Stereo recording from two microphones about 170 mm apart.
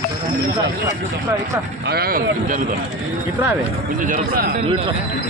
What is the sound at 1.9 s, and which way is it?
Speech, 65° right (ahead or behind).